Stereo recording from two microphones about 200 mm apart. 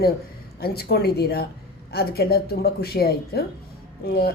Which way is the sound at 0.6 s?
50° left (ahead or behind).